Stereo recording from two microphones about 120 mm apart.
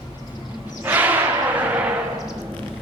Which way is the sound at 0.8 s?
15° right (ahead or behind).